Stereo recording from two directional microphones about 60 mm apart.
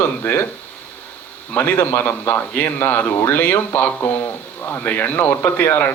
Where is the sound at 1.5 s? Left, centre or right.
Left.